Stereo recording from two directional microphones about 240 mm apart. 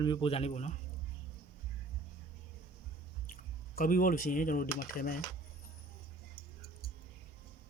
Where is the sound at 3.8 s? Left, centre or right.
Left.